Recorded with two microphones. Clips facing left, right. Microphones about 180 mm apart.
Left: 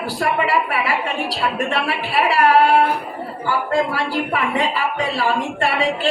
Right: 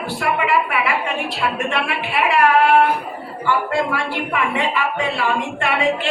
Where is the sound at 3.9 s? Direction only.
35° left (ahead or behind).